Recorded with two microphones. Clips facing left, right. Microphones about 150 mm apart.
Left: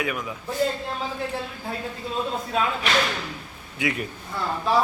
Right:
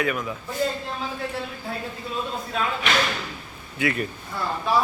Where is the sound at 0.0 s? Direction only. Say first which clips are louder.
Right 3 dB; 10° left (ahead or behind).